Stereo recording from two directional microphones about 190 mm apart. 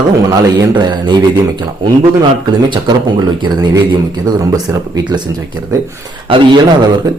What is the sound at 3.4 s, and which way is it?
A man's voice, 20° right (ahead or behind).